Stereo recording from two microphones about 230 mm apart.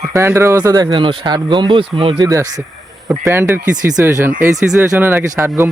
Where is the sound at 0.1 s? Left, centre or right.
Centre.